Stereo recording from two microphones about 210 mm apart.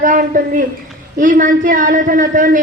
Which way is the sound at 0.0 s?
40° right (ahead or behind).